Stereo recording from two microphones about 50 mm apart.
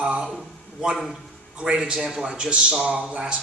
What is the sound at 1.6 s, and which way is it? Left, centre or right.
A man's voice, centre.